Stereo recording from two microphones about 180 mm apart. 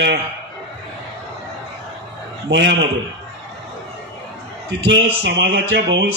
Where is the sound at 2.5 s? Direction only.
80° right.